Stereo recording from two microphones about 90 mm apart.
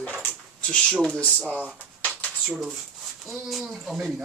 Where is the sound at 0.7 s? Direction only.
10° left (ahead or behind).